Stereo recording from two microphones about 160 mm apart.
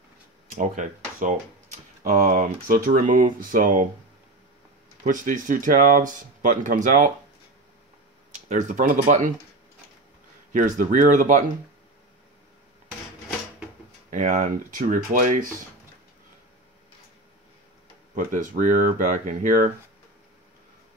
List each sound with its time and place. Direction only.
0.5 s speech: 55° right (ahead or behind)
5.0 s speech: 55° right (ahead or behind)
8.5 s speech: 55° right (ahead or behind)
10.5 s speech: 55° right (ahead or behind)
14.1 s speech: 50° right (ahead or behind)
18.1 s speech: 55° right (ahead or behind)